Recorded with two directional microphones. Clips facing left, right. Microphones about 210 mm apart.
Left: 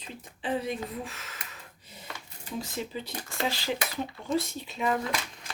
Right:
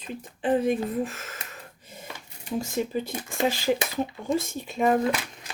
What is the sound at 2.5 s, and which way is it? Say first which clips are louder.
Speech: right 7 dB; 50° right (ahead or behind).